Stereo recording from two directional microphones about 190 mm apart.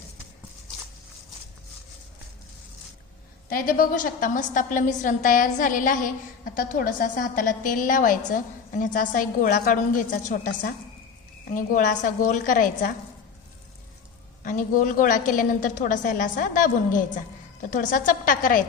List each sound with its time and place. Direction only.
3.5 s a woman's voice: 50° left (ahead or behind)
14.4 s a woman's voice: 45° left (ahead or behind)